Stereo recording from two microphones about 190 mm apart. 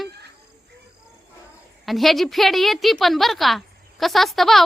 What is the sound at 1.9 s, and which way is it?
Speech, centre (ahead or behind).